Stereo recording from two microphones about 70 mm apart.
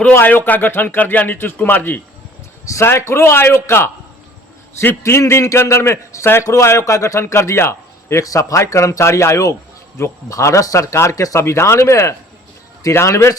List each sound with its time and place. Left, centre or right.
0.1 s a man's voice: left
5.0 s speech: left
8.2 s speech: left